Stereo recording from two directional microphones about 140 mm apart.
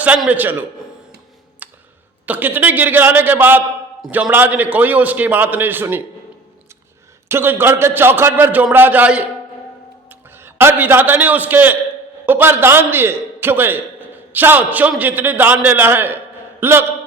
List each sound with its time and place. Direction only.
0.0 s a man's voice: 10° right (ahead or behind)
1.6 s a sound: 10° right (ahead or behind)
2.2 s a man's voice: 10° right (ahead or behind)
7.3 s a man's voice: 15° right (ahead or behind)